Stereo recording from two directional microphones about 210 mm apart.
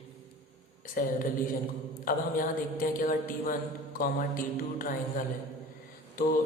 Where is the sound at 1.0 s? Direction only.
40° left (ahead or behind).